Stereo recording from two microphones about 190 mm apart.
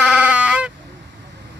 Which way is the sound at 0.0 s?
5° right (ahead or behind).